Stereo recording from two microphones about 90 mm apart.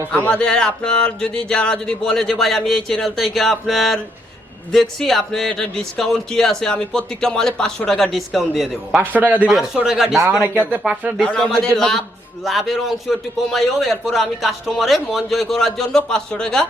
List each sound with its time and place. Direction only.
0.3 s a man's voice: 10° left (ahead or behind)
9.0 s a man's voice: 20° right (ahead or behind)
9.5 s a man's voice: 5° right (ahead or behind)
10.7 s a man's voice: 15° right (ahead or behind)
11.2 s a man's voice: 10° left (ahead or behind)